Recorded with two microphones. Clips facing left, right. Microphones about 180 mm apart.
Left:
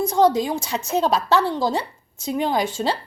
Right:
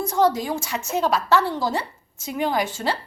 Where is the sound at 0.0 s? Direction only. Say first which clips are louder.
Left 3 dB; 15° left (ahead or behind).